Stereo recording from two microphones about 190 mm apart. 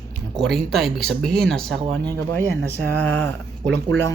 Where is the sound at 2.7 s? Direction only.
10° left (ahead or behind).